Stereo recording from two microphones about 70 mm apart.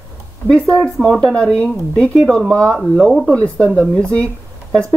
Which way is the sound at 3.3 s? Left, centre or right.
Centre.